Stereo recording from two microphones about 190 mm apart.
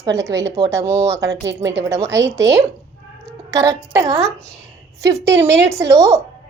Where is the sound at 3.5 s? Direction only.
15° right (ahead or behind).